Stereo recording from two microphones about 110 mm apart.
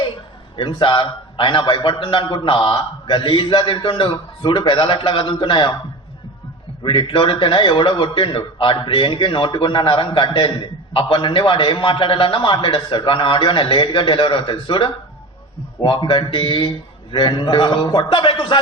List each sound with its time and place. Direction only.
0.5 s a man's voice: 50° left (ahead or behind)
6.8 s a man's voice: 50° left (ahead or behind)